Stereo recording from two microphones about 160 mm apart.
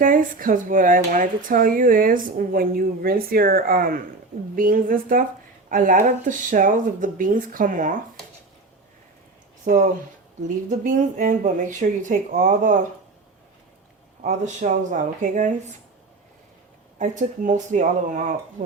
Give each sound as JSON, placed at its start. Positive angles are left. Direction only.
{"t": 0.0, "sound": "speech", "side_deg": -60}
{"t": 9.6, "sound": "speech", "side_deg": -55}
{"t": 14.2, "sound": "speech", "side_deg": -50}
{"t": 17.0, "sound": "speech", "side_deg": -50}